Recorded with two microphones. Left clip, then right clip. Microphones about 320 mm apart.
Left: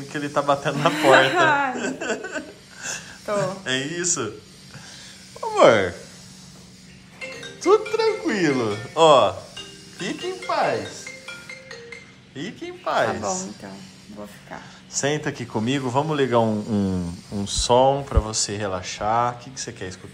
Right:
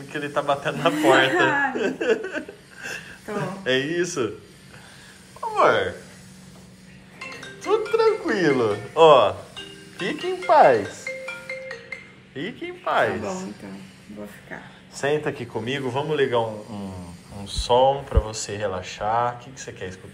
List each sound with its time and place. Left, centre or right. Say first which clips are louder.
0.1 s a woman's voice: left 2 dB; centre
5.4 s speech: left 3 dB; centre
7.6 s a woman's voice: left 1 dB; centre
12.4 s a woman's voice: right 2 dB; centre
15.0 s a woman's voice: right 1 dB; centre
17.5 s a woman's voice: left 1 dB; centre